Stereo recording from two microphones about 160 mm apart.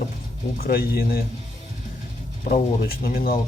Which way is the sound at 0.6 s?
70° left (ahead or behind).